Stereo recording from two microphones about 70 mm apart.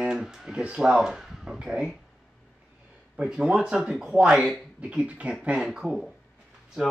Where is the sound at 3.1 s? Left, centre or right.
Centre.